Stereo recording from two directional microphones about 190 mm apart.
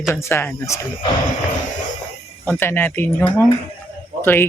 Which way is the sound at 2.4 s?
10° left (ahead or behind).